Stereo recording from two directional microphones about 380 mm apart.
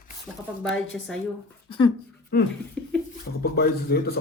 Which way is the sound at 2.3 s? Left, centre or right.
Left.